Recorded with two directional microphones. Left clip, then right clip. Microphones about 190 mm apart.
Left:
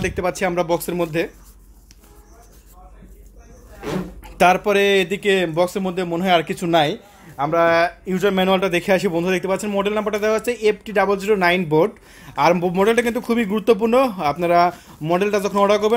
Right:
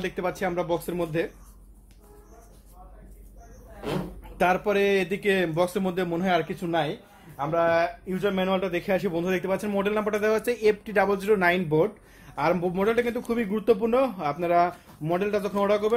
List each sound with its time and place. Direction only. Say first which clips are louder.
0.0 s speech: left 7 dB; 25° left (ahead or behind)
4.2 s speech: left 9 dB; 25° left (ahead or behind); by 6.2 s 10° left (ahead or behind)
6.2 s speech: left 9 dB; 25° left (ahead or behind)
6.5 s speech: left 9 dB; 45° left (ahead or behind); by 11.9 s 30° left (ahead or behind)
12.4 s speech: left 8 dB; 40° left (ahead or behind)